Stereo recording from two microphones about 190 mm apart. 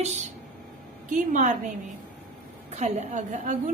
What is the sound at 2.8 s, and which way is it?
Speech, 40° right (ahead or behind).